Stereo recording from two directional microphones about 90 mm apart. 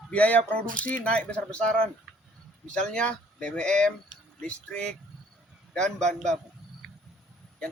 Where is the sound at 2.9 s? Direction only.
10° left (ahead or behind).